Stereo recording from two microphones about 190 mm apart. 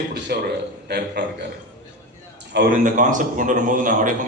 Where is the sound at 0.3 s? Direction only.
55° right (ahead or behind).